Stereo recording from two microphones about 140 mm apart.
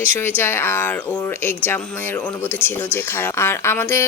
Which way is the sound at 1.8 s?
5° left (ahead or behind).